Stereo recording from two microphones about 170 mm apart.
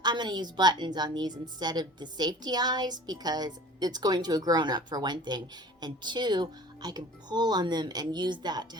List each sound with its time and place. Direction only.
0.0 s a woman's voice: 25° right (ahead or behind)